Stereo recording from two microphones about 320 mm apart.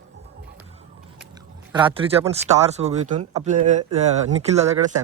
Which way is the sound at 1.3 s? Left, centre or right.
Centre.